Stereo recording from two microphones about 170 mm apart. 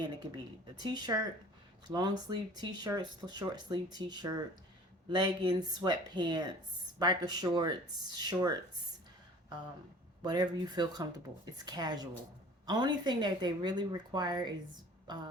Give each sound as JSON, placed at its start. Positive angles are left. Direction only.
{"t": 0.0, "sound": "speech", "side_deg": -25}
{"t": 10.2, "sound": "a woman's voice", "side_deg": -25}